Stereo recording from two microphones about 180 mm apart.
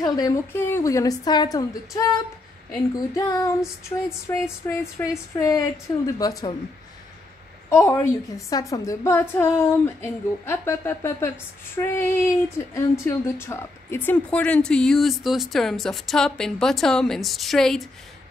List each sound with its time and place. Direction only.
0.0 s a woman's voice: 20° left (ahead or behind)
3.2 s a woman's voice: 15° left (ahead or behind)
7.7 s a woman's voice: 15° left (ahead or behind)